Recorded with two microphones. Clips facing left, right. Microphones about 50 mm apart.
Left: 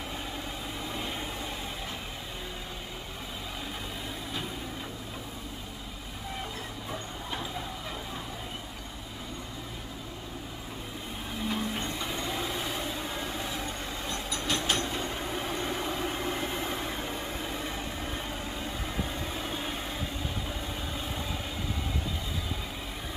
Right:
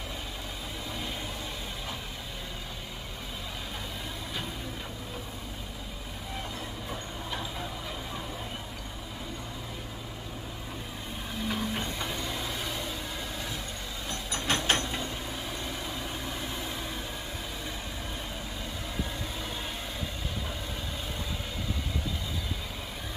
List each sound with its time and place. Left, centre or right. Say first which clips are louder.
11.4 s train: even; centre
12.2 s vehicle: left 2 dB; centre
14.3 s a sound: right 3 dB; right
15.3 s vehicle: left 4 dB; left
19.3 s vehicle: left 2 dB; centre